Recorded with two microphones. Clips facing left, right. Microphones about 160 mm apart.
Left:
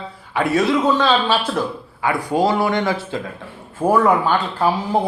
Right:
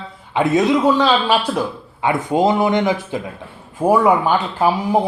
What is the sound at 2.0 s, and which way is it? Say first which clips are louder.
Speech: right 2 dB; 20° right (ahead or behind).